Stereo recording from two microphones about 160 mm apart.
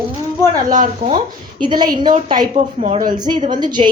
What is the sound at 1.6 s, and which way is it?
Speech, 25° right (ahead or behind).